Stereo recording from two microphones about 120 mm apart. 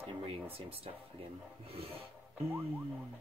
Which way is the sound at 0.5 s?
50° right (ahead or behind).